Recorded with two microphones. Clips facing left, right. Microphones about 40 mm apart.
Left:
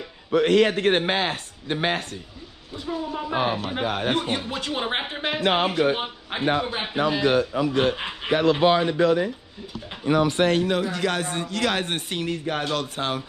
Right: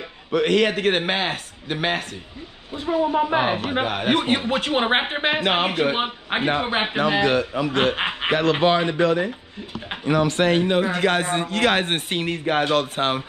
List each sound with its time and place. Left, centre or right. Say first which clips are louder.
0.4 s a man's voice: even; right
0.7 s speech: even; centre
2.7 s a man's voice: right 8 dB; right
7.7 s a man's voice: right 2 dB; right
10.6 s a man's voice: right 4 dB; right